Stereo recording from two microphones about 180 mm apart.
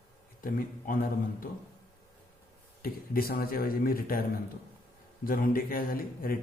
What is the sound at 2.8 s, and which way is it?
A man's voice, 55° left (ahead or behind).